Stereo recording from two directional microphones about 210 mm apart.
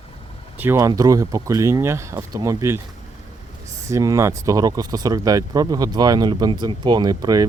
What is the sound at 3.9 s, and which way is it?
Speech, 15° right (ahead or behind).